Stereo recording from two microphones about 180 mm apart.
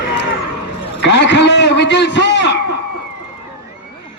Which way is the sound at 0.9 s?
75° left (ahead or behind).